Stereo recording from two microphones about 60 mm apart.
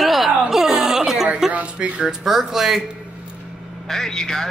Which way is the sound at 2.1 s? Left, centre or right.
Centre.